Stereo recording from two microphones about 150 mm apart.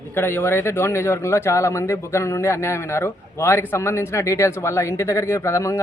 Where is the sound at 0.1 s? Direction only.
15° left (ahead or behind).